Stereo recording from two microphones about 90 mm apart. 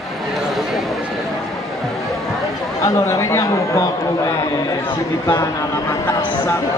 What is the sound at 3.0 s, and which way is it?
Speech, 30° left (ahead or behind).